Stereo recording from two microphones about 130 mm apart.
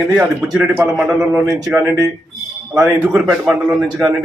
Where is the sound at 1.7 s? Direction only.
15° right (ahead or behind).